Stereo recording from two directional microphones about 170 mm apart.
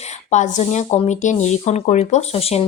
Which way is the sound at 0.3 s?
45° left (ahead or behind).